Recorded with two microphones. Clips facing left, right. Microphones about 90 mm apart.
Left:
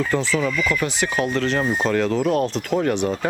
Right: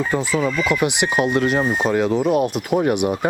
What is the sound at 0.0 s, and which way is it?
Speech, 10° right (ahead or behind).